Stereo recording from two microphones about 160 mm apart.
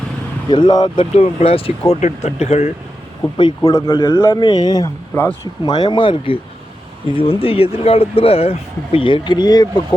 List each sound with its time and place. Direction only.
0.5 s speech: 25° left (ahead or behind); by 2.7 s 45° left (ahead or behind)
3.3 s speech: 25° left (ahead or behind)
5.6 s speech: 25° left (ahead or behind)